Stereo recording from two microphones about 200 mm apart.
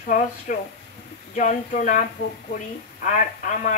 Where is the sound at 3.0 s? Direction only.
40° left (ahead or behind).